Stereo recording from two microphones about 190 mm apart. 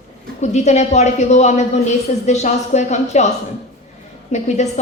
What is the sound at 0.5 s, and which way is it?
A woman's voice, 35° left (ahead or behind).